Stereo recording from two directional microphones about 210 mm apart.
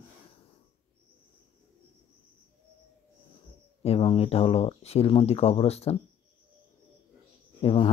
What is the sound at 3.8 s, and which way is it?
Speech, 30° left (ahead or behind).